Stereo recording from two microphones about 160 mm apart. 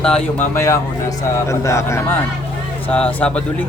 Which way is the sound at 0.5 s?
20° left (ahead or behind).